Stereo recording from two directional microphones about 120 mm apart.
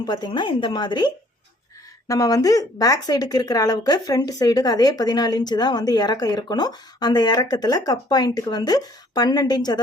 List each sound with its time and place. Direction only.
0.0 s speech: 35° left (ahead or behind)